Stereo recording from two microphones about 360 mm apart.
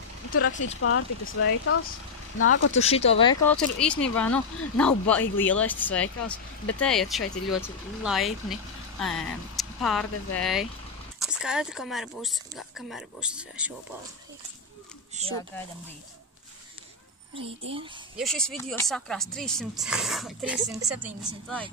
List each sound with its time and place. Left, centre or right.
0.3 s speech: left
2.7 s speech: centre
15.2 s speech: centre
18.1 s speech: centre